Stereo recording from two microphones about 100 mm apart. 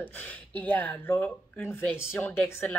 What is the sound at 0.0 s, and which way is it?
Speech, 15° left (ahead or behind).